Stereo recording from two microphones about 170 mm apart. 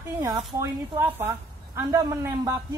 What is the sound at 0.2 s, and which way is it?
A man's voice, 20° right (ahead or behind).